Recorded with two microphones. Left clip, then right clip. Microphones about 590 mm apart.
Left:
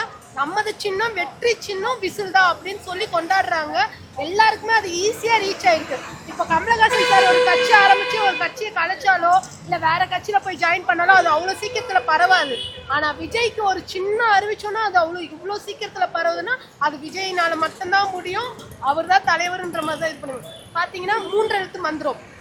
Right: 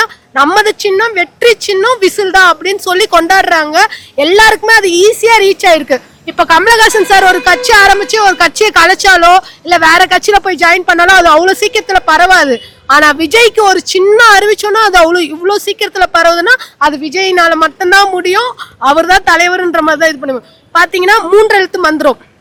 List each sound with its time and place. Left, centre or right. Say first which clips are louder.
0.0 s speech: right 16 dB; right